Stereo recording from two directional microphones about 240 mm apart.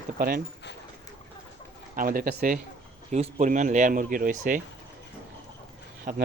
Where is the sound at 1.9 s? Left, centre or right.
Right.